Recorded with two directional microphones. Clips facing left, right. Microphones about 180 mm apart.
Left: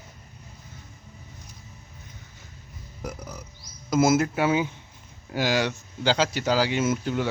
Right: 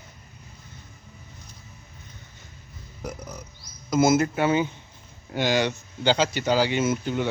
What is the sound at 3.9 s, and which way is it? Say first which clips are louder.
Speech: right 1 dB; 5° left (ahead or behind).